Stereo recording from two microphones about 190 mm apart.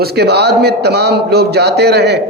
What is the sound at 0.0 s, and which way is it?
A man's voice, 60° right (ahead or behind).